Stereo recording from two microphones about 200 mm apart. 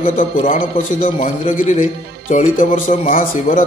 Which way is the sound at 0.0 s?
40° left (ahead or behind).